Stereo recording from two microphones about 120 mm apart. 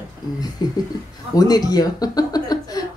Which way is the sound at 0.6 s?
35° left (ahead or behind).